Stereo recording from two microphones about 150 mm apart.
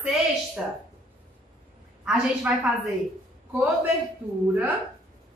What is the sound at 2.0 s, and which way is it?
Speech, 5° right (ahead or behind).